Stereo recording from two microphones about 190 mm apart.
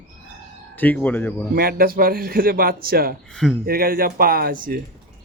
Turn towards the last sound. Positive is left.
turn(degrees=-50)  # may be behind; listen again after turning